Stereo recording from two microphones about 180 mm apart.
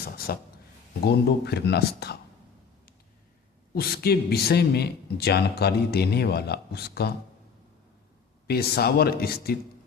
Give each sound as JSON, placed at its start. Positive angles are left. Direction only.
{"t": 0.0, "sound": "a man's voice", "side_deg": 60}
{"t": 3.8, "sound": "a man's voice", "side_deg": 60}
{"t": 8.4, "sound": "a man's voice", "side_deg": 60}